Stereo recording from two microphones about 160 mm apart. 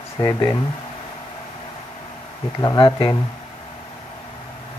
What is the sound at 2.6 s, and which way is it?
Speech, 25° left (ahead or behind).